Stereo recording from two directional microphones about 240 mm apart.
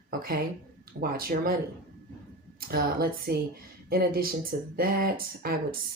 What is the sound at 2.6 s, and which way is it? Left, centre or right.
Speech, right.